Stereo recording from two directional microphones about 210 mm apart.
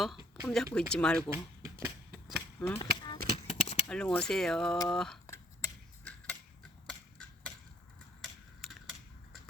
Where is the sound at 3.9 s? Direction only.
5° left (ahead or behind).